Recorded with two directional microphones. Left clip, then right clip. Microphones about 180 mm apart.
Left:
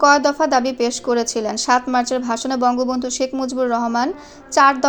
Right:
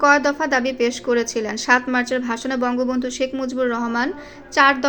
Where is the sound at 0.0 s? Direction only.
20° left (ahead or behind).